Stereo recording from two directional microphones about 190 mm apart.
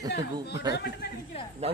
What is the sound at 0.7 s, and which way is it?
Speech, 55° left (ahead or behind).